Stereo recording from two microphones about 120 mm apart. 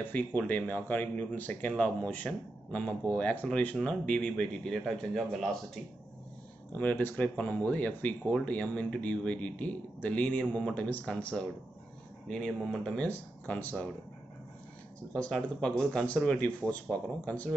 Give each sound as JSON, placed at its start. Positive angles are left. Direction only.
{"t": 0.0, "sound": "a man's voice", "side_deg": 15}
{"t": 6.7, "sound": "a man's voice", "side_deg": 15}
{"t": 15.1, "sound": "a man's voice", "side_deg": 5}